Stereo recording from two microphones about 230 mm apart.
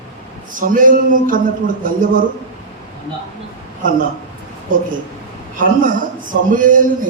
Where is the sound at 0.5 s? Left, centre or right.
Right.